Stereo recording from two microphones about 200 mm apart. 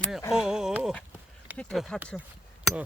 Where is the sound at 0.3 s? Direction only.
5° right (ahead or behind).